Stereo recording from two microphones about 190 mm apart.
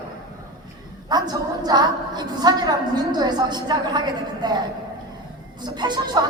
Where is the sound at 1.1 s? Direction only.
20° right (ahead or behind).